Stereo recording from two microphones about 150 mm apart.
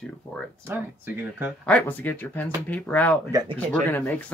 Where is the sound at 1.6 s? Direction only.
10° left (ahead or behind).